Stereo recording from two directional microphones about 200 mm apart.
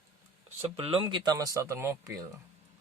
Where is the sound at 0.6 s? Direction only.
30° right (ahead or behind).